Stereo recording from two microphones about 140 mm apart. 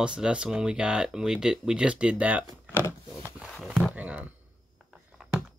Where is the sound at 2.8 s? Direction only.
20° left (ahead or behind).